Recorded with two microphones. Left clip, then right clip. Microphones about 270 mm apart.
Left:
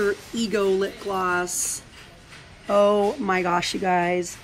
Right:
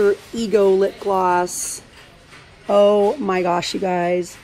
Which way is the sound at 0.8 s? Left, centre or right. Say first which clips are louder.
Right 7 dB; left.